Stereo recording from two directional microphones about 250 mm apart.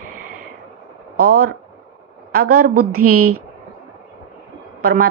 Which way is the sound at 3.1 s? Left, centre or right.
Right.